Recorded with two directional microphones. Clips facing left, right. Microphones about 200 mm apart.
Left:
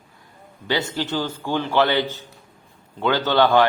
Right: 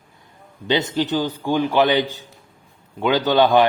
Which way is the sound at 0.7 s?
20° right (ahead or behind).